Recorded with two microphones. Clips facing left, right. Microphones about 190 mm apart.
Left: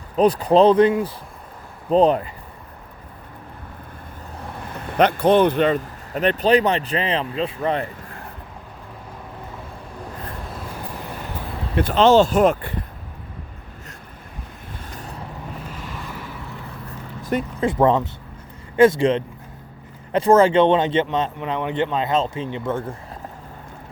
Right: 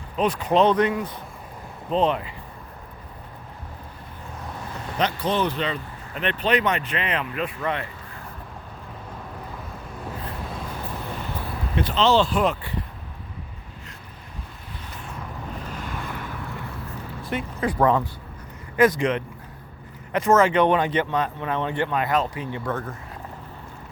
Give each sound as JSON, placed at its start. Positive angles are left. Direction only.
{"t": 0.2, "sound": "speech", "side_deg": 35}
{"t": 1.9, "sound": "speech", "side_deg": 40}
{"t": 4.9, "sound": "speech", "side_deg": 55}
{"t": 11.8, "sound": "speech", "side_deg": 50}
{"t": 14.9, "sound": "vehicle", "side_deg": 40}
{"t": 15.7, "sound": "vehicle", "side_deg": 0}
{"t": 17.6, "sound": "speech", "side_deg": 25}